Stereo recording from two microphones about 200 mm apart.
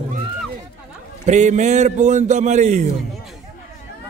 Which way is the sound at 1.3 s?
35° right (ahead or behind).